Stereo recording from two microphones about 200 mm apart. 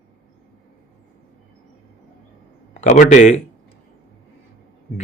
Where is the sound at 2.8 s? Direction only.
35° left (ahead or behind).